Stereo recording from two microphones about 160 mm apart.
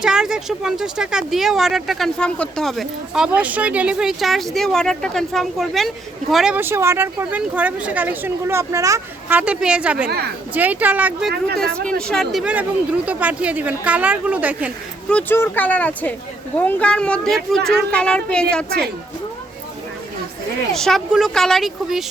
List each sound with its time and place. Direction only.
0.0 s speech: 5° right (ahead or behind)
6.6 s a woman's voice: 15° right (ahead or behind)
9.4 s a woman's voice: 5° right (ahead or behind)
11.3 s speech: 90° right
11.6 s a woman's voice: 5° left (ahead or behind)
15.1 s speech: 10° left (ahead or behind)
20.7 s speech: 5° left (ahead or behind)